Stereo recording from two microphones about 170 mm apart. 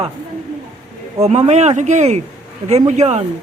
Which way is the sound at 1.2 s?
40° right (ahead or behind).